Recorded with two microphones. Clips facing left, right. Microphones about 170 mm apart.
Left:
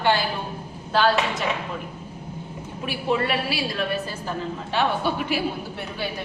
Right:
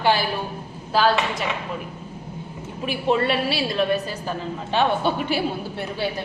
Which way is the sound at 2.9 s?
25° right (ahead or behind).